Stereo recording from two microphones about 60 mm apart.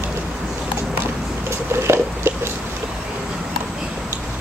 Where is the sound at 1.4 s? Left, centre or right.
Right.